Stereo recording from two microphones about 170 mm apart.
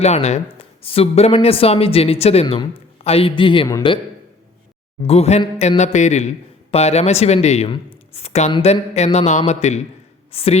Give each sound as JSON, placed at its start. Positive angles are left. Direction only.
{"t": 0.0, "sound": "speech", "side_deg": 40}
{"t": 5.0, "sound": "speech", "side_deg": 40}